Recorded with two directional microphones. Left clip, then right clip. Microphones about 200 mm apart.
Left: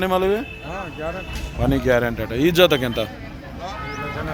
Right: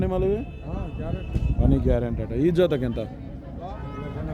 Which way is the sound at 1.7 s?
10° left (ahead or behind).